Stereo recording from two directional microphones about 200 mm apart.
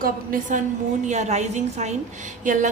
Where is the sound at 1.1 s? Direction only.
35° right (ahead or behind).